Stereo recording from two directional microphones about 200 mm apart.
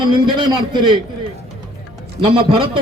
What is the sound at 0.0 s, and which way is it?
Speech, 25° right (ahead or behind).